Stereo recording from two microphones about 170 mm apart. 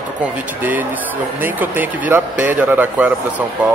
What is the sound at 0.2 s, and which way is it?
Speech, 10° right (ahead or behind).